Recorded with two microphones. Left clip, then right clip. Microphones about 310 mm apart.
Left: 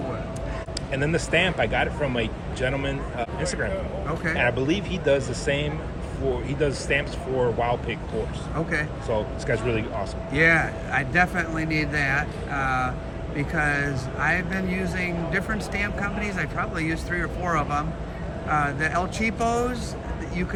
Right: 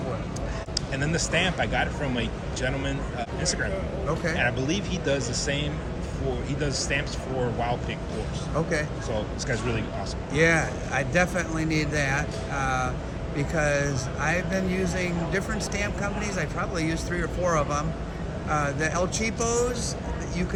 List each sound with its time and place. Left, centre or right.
0.9 s speech: left
9.0 s speech: centre
10.3 s speech: centre